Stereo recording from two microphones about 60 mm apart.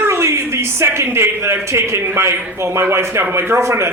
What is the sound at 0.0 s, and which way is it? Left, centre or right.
A man's voice, right.